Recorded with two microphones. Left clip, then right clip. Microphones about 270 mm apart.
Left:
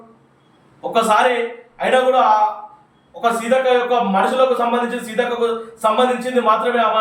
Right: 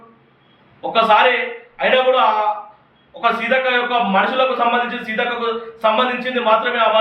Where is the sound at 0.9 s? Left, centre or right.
Centre.